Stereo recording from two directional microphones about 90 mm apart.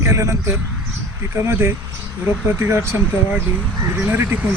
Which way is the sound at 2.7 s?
30° right (ahead or behind).